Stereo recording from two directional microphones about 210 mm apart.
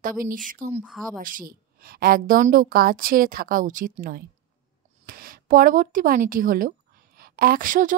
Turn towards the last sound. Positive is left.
turn(degrees=-40)  # may be behind; listen again after turning